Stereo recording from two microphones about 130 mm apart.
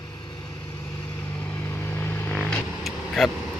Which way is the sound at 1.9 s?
15° left (ahead or behind).